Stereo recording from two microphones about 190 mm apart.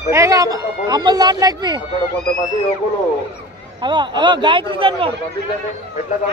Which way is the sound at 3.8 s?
25° right (ahead or behind).